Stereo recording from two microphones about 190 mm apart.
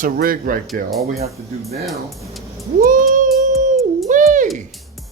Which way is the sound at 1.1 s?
35° right (ahead or behind).